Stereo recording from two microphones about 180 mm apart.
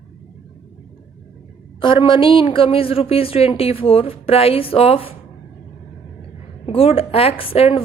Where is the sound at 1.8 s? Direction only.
30° left (ahead or behind).